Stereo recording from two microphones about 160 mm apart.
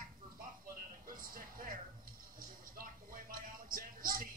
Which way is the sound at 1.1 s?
60° right (ahead or behind).